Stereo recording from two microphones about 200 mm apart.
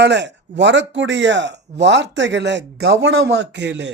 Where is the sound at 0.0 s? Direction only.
60° right (ahead or behind).